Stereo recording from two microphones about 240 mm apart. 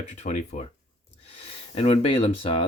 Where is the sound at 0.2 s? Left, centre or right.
Left.